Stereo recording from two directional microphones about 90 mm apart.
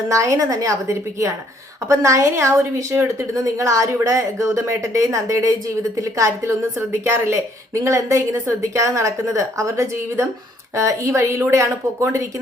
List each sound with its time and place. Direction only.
0.1 s speech: 35° right (ahead or behind)
1.9 s speech: 35° right (ahead or behind)